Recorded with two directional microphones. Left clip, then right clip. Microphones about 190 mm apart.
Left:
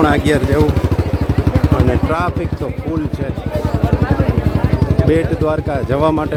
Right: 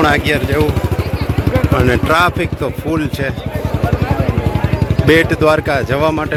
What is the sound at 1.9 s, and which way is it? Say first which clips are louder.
Speech: right 5 dB; centre (ahead or behind).